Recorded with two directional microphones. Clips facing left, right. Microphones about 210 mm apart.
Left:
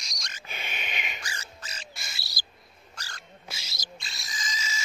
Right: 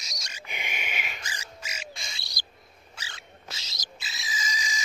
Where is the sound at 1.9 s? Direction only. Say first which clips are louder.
Right 2 dB; 5° left (ahead or behind).